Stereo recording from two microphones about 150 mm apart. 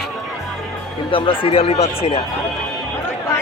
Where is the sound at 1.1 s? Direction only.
35° left (ahead or behind).